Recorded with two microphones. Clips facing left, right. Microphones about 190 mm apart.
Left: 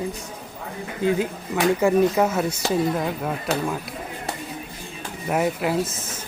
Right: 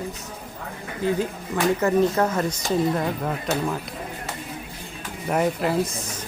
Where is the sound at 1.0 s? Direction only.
15° left (ahead or behind).